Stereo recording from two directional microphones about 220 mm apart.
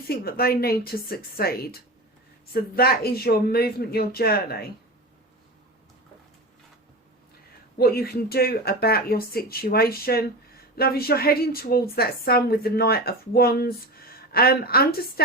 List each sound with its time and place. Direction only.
0.1 s a woman's voice: 45° left (ahead or behind)
7.8 s a woman's voice: 45° left (ahead or behind)